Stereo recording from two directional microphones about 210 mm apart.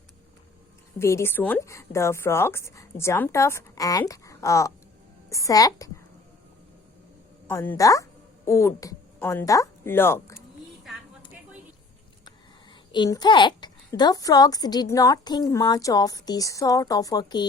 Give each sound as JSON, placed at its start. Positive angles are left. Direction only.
{"t": 0.9, "sound": "a child's voice", "side_deg": 15}
{"t": 7.4, "sound": "a woman's voice", "side_deg": 10}
{"t": 12.9, "sound": "a child's voice", "side_deg": 20}